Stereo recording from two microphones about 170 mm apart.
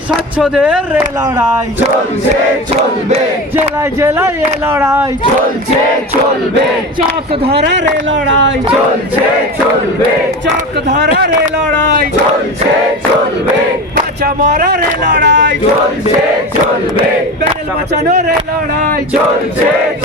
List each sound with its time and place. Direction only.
0.1 s speech: 5° right (ahead or behind)
4.7 s speech: 15° right (ahead or behind)
7.5 s speech: 85° right
11.3 s speech: 60° right (ahead or behind)
14.5 s speech: 60° right (ahead or behind); by 15.5 s 90° right
17.9 s speech: 45° right (ahead or behind)